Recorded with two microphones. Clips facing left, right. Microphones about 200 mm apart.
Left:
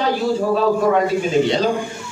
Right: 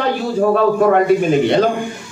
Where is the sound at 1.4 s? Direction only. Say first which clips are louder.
Right 4 dB; 55° right (ahead or behind).